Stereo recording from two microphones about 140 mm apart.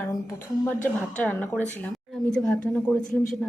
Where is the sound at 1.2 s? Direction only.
15° left (ahead or behind).